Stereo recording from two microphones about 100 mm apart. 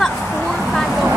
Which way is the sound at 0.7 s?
Centre (ahead or behind).